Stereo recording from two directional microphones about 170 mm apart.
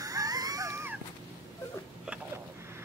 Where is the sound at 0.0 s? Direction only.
20° right (ahead or behind).